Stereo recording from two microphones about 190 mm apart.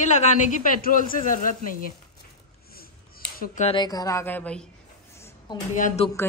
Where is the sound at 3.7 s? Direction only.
20° left (ahead or behind).